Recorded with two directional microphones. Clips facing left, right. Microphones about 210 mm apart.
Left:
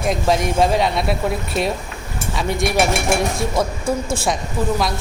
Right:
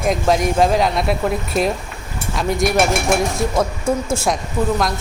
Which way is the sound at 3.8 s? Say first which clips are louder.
Right 2 dB; 25° right (ahead or behind).